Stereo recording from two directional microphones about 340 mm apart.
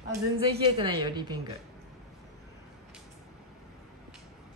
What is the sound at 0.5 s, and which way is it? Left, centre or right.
Speech, centre.